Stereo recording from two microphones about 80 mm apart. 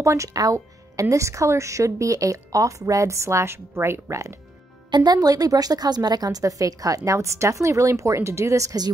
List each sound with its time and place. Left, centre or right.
0.0 s speech: right
4.9 s a woman's voice: right